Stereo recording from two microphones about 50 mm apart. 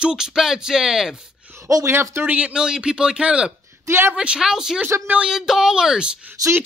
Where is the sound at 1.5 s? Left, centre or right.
Right.